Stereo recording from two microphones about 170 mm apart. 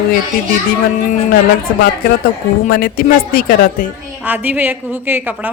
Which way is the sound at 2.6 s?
60° left (ahead or behind).